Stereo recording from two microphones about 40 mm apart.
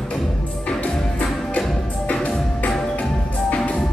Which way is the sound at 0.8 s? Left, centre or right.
Left.